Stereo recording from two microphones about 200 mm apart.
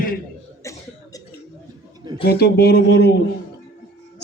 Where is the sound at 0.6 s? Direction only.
15° left (ahead or behind).